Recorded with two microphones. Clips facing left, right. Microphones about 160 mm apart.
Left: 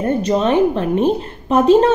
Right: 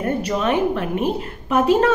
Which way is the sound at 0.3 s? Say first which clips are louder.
Left 6 dB; 30° left (ahead or behind).